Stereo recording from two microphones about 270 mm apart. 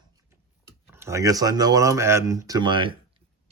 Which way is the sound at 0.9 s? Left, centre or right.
Centre.